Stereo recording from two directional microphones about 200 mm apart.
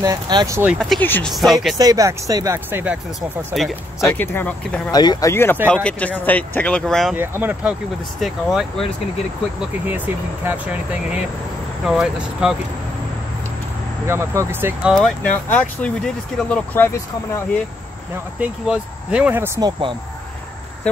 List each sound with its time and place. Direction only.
0.0 s speech: 20° right (ahead or behind)
0.7 s speech: 5° left (ahead or behind)
1.8 s speech: 15° right (ahead or behind); by 3.7 s centre (ahead or behind)
4.0 s speech: 10° left (ahead or behind)
4.9 s speech: 20° left (ahead or behind); by 7.2 s centre (ahead or behind)
7.2 s speech: 10° right (ahead or behind)
9.8 s speech: 10° right (ahead or behind)
14.0 s speech: 15° right (ahead or behind); by 17.0 s 10° left (ahead or behind)
18.4 s speech: 5° right (ahead or behind)